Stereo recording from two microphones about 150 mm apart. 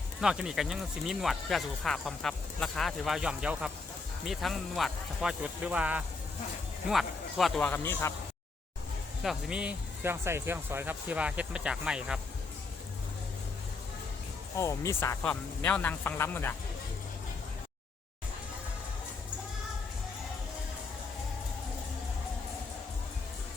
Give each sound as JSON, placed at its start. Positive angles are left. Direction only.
{"t": 0.2, "sound": "speech", "side_deg": -5}
{"t": 7.7, "sound": "speech", "side_deg": 15}
{"t": 9.2, "sound": "speech", "side_deg": -5}
{"t": 14.5, "sound": "speech", "side_deg": 20}